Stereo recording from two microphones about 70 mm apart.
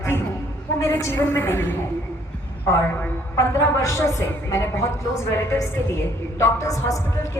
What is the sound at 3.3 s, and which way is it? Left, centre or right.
A woman's voice, left.